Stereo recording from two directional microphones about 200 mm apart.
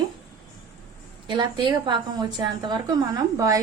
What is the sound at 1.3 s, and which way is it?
A woman's voice, 25° right (ahead or behind).